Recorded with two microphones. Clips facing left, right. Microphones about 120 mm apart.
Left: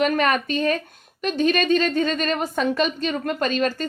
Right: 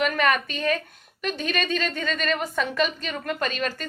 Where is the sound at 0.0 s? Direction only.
35° left (ahead or behind).